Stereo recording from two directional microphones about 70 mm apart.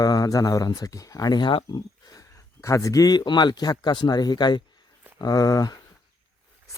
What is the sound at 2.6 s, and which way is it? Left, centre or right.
Speech, left.